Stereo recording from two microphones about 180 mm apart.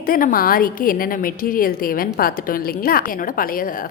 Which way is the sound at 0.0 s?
50° left (ahead or behind).